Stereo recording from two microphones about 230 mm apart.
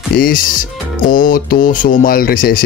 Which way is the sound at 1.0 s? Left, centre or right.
Left.